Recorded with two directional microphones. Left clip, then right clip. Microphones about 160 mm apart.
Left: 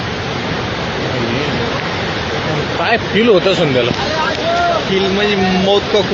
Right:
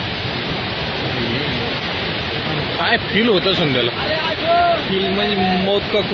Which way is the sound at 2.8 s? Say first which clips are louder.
Left 3 dB; 40° right (ahead or behind).